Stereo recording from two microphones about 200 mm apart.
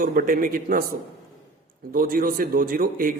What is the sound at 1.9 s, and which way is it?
A man's voice, 45° right (ahead or behind).